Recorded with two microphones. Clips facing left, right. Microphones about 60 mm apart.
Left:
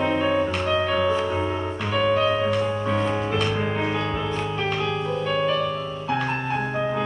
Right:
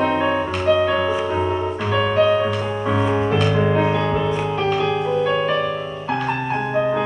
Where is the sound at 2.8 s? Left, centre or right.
Right.